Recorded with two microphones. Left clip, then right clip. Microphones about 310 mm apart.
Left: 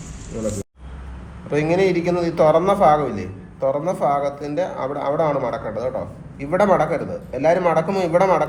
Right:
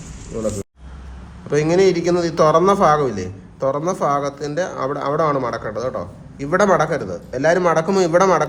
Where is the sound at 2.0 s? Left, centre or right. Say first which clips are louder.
Right 1 dB; right.